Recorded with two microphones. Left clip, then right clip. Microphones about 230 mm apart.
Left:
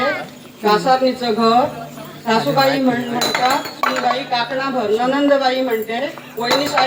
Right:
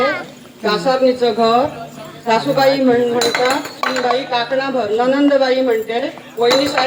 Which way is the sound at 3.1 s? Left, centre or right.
Centre.